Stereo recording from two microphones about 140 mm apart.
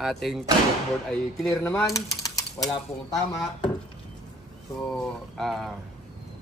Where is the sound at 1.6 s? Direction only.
20° left (ahead or behind).